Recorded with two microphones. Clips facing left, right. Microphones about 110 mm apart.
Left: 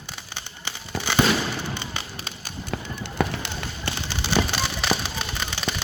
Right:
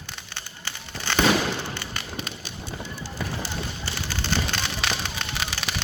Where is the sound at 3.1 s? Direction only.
65° left (ahead or behind).